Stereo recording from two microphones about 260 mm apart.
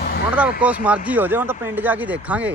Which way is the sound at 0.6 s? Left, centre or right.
Centre.